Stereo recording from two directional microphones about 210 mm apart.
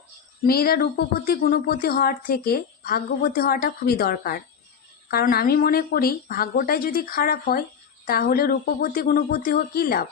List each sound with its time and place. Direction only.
0.4 s speech: 45° left (ahead or behind)